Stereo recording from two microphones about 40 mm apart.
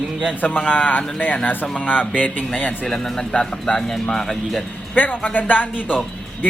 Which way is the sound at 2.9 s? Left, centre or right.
Centre.